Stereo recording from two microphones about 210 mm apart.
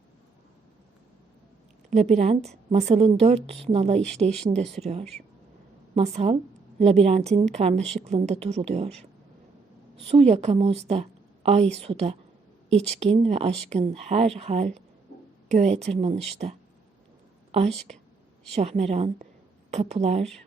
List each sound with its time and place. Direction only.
1.9 s a woman's voice: 35° right (ahead or behind)
10.1 s a woman's voice: 30° right (ahead or behind)
17.5 s a woman's voice: 30° right (ahead or behind)